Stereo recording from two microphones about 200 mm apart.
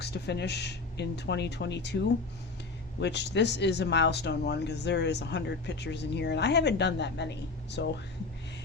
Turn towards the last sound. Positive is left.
turn(degrees=60)  # may be behind; listen again after turning